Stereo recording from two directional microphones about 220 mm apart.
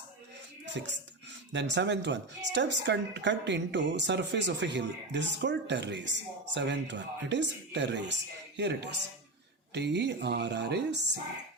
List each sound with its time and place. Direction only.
0.6 s music: 55° right (ahead or behind)
1.5 s speech: 50° right (ahead or behind)